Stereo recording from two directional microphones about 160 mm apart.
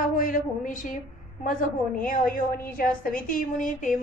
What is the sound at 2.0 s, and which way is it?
A woman's voice, 60° left (ahead or behind).